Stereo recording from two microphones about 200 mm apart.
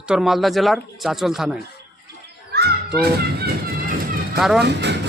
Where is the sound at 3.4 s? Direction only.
50° right (ahead or behind).